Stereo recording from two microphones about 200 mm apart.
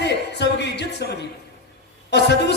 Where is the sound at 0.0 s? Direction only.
60° left (ahead or behind).